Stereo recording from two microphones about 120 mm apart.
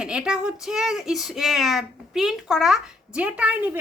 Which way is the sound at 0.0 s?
5° right (ahead or behind).